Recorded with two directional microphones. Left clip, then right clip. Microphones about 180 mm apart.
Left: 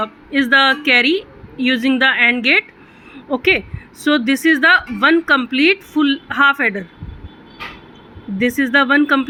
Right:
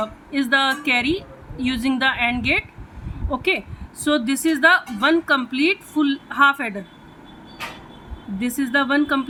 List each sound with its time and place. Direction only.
0.0 s a woman's voice: 15° left (ahead or behind)
8.4 s a woman's voice: 15° left (ahead or behind)